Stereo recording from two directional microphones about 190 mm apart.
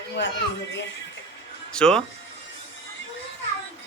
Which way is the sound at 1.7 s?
5° left (ahead or behind).